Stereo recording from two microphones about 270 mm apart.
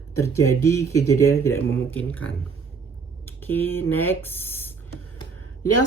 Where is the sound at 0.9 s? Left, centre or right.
Left.